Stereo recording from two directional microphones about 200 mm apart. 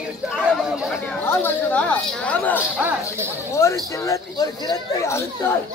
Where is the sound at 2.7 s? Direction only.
10° right (ahead or behind).